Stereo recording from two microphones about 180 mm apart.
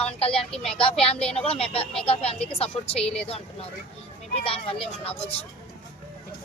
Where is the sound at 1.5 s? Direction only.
30° left (ahead or behind).